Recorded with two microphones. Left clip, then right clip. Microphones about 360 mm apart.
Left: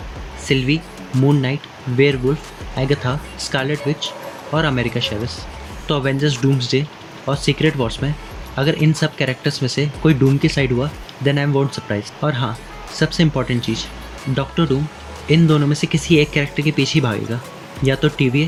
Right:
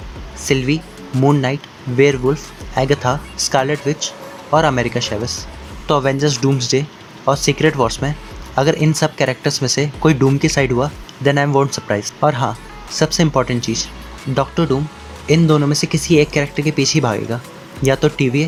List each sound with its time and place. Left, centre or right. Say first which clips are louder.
0.4 s speech: right 1 dB; centre
1.1 s speech: right 3 dB; centre
2.7 s speech: right 5 dB; centre